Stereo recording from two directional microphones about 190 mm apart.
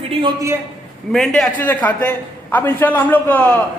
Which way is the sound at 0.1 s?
25° right (ahead or behind).